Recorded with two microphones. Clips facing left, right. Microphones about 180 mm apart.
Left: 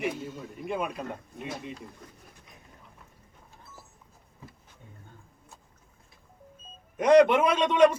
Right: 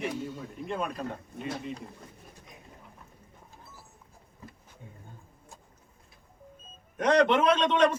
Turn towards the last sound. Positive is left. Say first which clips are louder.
# left 2 dB
turn(degrees=10)  # may be behind; listen again after turning